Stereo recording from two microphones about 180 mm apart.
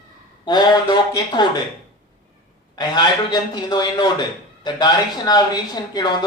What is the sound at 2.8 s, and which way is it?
Speech, 25° left (ahead or behind).